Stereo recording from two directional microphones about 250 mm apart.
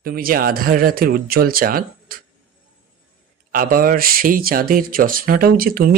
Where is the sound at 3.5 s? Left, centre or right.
Right.